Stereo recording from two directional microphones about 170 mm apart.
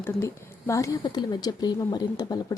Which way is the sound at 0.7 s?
20° left (ahead or behind).